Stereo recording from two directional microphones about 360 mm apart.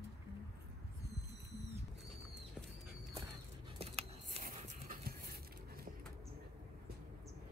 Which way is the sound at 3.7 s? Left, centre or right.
Centre.